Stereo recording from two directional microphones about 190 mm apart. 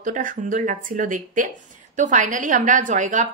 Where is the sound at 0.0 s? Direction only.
45° right (ahead or behind).